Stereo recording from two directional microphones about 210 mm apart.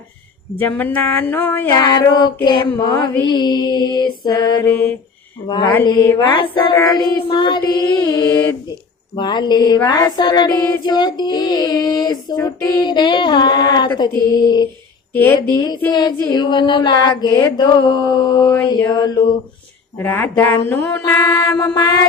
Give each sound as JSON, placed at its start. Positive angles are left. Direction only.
{"t": 0.6, "sound": "speech", "side_deg": 10}
{"t": 1.8, "sound": "female singing", "side_deg": 20}
{"t": 4.7, "sound": "speech", "side_deg": 5}
{"t": 5.5, "sound": "female singing", "side_deg": 20}
{"t": 15.1, "sound": "speech", "side_deg": 10}
{"t": 15.9, "sound": "female singing", "side_deg": 20}
{"t": 20.0, "sound": "speech", "side_deg": 10}